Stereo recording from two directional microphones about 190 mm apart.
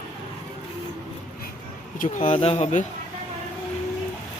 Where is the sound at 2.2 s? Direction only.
30° left (ahead or behind).